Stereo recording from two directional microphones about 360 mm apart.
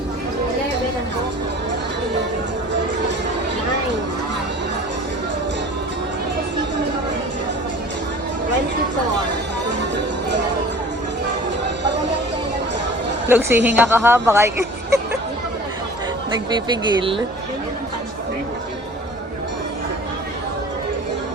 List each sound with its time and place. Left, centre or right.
9.9 s music: right
13.2 s speech: centre
16.5 s speech: centre